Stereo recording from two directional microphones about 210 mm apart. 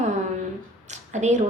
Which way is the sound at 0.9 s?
35° right (ahead or behind).